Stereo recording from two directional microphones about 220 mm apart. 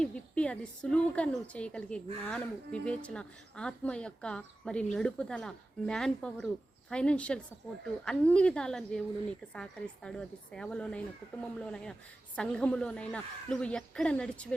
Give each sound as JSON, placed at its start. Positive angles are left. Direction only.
{"t": 0.0, "sound": "a woman's voice", "side_deg": 5}